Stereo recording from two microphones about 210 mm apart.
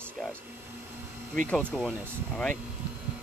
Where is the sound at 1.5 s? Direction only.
5° left (ahead or behind).